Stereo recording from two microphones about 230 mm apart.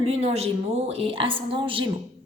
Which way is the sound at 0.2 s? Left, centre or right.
Right.